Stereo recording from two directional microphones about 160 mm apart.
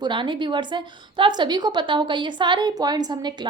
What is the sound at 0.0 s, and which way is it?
A woman's voice, 30° right (ahead or behind).